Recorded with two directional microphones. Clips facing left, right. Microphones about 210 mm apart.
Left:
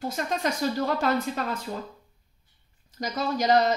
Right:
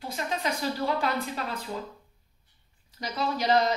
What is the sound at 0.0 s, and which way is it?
Speech, 45° left (ahead or behind).